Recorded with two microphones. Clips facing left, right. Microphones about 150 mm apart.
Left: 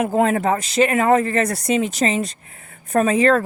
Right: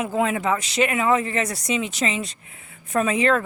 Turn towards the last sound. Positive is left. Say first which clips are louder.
# left 4 dB
turn(degrees=40)  # may be behind; listen again after turning